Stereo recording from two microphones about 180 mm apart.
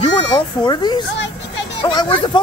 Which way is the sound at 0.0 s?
25° left (ahead or behind).